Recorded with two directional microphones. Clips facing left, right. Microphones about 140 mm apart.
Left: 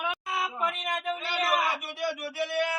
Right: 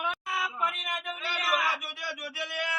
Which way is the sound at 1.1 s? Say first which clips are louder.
Left 1 dB; 30° left (ahead or behind).